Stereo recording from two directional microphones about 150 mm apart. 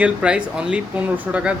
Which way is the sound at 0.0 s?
10° right (ahead or behind).